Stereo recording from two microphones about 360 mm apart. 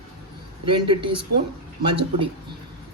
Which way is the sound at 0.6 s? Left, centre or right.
Centre.